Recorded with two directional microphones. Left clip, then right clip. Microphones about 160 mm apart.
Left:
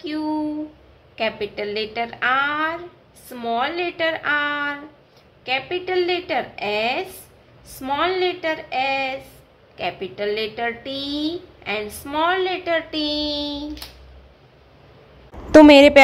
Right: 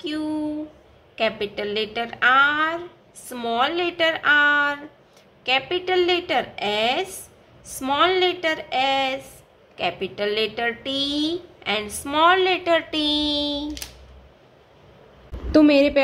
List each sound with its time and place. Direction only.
0.0 s a sound: 10° right (ahead or behind)
1.1 s a woman's voice: 10° right (ahead or behind)
15.5 s a woman's voice: 45° left (ahead or behind)